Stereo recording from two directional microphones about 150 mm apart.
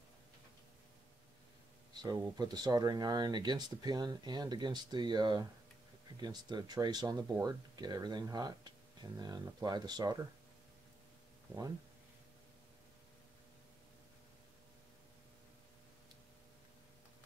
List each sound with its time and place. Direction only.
2.0 s speech: 25° right (ahead or behind)